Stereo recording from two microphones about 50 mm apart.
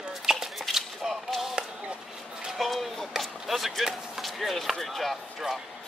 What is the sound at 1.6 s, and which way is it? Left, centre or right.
Chop, centre.